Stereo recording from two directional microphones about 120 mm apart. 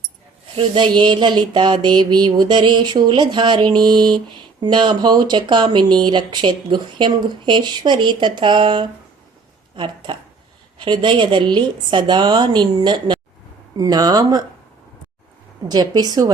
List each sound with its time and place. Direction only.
0.5 s mantra: 45° right (ahead or behind)
9.7 s speech: 40° right (ahead or behind)
10.8 s mantra: 40° right (ahead or behind)
15.7 s mantra: 35° right (ahead or behind)